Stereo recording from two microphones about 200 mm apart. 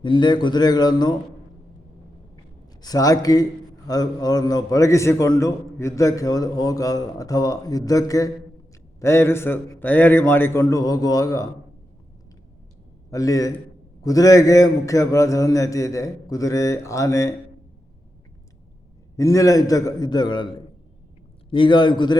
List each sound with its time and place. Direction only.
0.0 s a man's voice: 25° left (ahead or behind)
2.8 s a man's voice: 20° left (ahead or behind)
13.1 s a man's voice: 15° left (ahead or behind)
19.1 s a man's voice: 15° left (ahead or behind)
21.5 s a man's voice: 25° left (ahead or behind)